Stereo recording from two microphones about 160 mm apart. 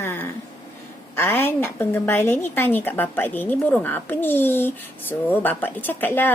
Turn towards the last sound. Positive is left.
turn(degrees=10)  # may be behind; listen again after turning